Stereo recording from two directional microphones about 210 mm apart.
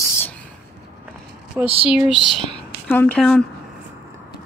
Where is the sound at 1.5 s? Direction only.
10° right (ahead or behind).